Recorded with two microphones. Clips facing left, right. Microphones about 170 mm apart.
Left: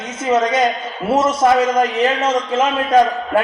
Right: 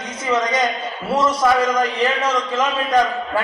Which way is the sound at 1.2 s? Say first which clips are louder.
Left 3 dB; 25° left (ahead or behind).